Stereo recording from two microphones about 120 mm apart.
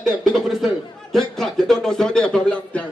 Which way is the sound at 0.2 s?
Centre (ahead or behind).